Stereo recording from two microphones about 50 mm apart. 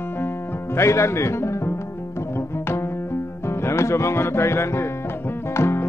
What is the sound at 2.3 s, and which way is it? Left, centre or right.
Music, left.